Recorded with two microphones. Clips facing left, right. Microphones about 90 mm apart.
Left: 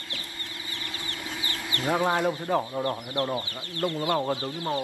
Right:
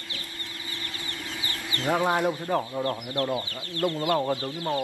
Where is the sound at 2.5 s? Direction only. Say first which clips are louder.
Even; 15° left (ahead or behind).